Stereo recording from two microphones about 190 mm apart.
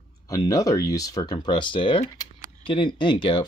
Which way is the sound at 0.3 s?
15° left (ahead or behind).